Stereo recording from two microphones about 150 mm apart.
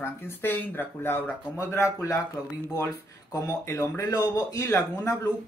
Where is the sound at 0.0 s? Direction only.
15° left (ahead or behind).